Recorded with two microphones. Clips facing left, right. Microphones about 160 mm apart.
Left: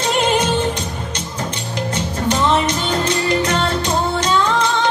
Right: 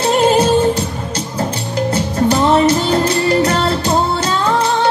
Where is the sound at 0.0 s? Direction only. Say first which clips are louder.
Right 5 dB; 30° right (ahead or behind).